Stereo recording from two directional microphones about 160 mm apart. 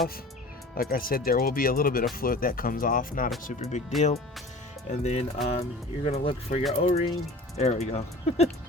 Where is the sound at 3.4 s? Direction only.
50° left (ahead or behind).